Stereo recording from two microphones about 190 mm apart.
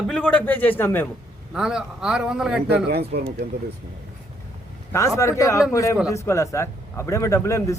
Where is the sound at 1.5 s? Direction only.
5° right (ahead or behind).